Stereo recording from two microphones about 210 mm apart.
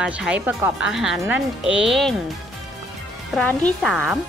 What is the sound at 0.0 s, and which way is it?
Speech, 5° right (ahead or behind).